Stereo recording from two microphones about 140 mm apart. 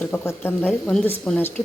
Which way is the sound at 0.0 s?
10° left (ahead or behind).